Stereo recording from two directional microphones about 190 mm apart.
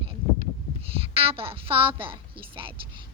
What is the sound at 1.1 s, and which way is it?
Speech, 30° right (ahead or behind).